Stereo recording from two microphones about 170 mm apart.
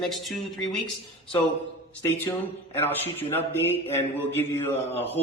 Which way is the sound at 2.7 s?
15° left (ahead or behind).